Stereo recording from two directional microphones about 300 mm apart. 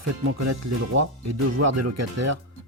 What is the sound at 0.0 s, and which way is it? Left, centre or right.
Speech, right.